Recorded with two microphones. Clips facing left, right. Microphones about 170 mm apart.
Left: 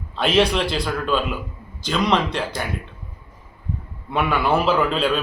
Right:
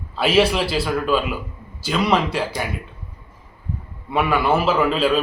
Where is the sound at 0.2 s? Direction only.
5° right (ahead or behind).